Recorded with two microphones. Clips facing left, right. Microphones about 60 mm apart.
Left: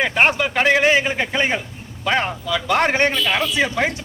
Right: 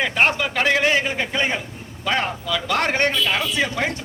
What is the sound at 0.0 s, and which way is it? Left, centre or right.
A man's voice, centre.